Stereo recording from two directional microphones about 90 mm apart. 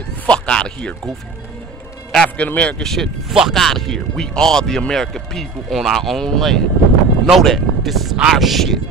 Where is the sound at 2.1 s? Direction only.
15° left (ahead or behind).